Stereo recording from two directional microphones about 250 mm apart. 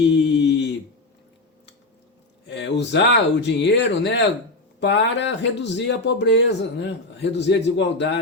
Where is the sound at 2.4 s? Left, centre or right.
Left.